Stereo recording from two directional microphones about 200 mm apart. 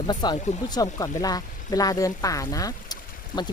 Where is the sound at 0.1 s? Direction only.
20° left (ahead or behind).